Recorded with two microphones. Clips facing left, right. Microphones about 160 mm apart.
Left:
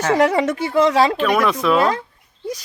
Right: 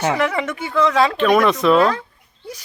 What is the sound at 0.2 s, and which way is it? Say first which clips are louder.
Speech: left 5 dB; 40° left (ahead or behind).